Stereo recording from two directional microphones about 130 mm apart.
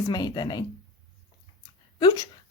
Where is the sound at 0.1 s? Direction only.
30° left (ahead or behind).